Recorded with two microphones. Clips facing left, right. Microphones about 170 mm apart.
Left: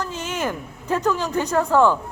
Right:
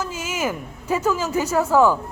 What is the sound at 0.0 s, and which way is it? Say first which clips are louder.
A man's voice: even; 5° right (ahead or behind).